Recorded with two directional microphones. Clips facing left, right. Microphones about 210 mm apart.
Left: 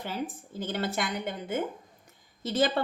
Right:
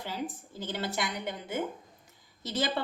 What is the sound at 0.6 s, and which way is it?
A woman's voice, 55° left (ahead or behind).